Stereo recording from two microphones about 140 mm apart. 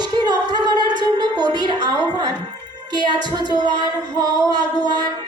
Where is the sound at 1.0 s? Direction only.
30° right (ahead or behind).